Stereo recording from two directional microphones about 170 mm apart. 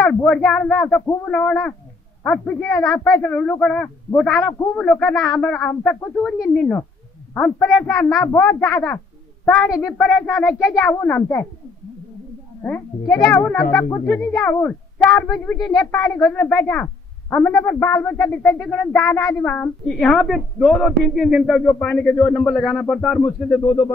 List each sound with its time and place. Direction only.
0.0 s a woman's voice: 5° left (ahead or behind)
13.2 s a woman's voice: 10° left (ahead or behind)
15.2 s a woman's voice: 20° left (ahead or behind)
22.6 s speech: centre (ahead or behind)